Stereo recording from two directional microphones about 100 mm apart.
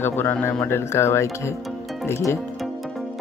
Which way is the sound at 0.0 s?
20° left (ahead or behind).